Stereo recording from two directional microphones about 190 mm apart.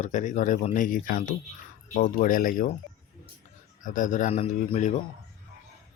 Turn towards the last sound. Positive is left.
turn(degrees=40)  # may be behind; listen again after turning